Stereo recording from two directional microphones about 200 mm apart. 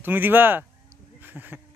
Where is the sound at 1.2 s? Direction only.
10° right (ahead or behind).